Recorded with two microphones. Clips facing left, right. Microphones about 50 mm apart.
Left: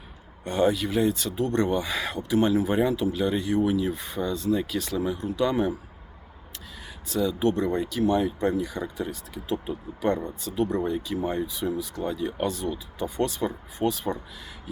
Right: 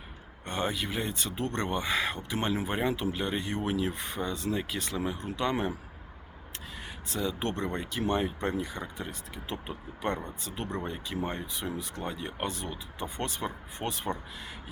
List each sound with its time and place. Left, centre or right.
0.4 s speech: right
7.1 s speech: right